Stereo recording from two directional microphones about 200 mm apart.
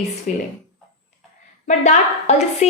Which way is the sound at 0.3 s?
40° left (ahead or behind).